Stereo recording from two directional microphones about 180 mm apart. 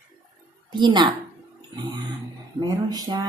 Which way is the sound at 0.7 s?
25° right (ahead or behind).